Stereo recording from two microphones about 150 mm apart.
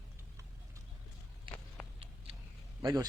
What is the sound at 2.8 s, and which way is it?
Speech, 20° right (ahead or behind).